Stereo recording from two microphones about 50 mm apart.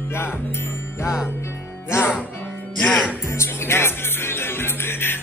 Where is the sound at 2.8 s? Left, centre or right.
Centre.